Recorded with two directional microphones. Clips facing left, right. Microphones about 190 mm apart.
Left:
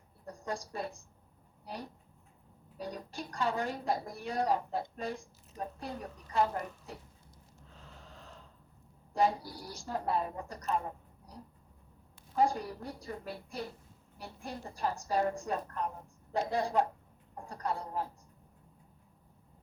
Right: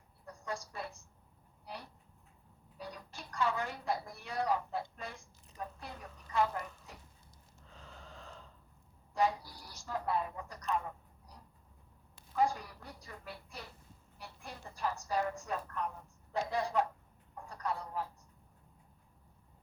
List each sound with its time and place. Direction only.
0.3 s a woman's voice: 35° left (ahead or behind)
7.7 s snort: centre (ahead or behind)
9.1 s a man's voice: 35° left (ahead or behind)